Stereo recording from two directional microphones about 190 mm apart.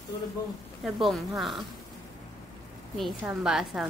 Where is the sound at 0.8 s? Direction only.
Centre (ahead or behind).